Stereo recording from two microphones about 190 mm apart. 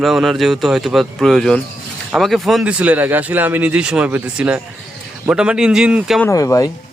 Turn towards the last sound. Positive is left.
turn(degrees=15)  # may be behind; listen again after turning